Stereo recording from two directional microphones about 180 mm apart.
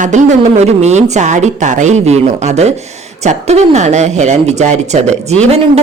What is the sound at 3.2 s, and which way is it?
Speech, 40° right (ahead or behind).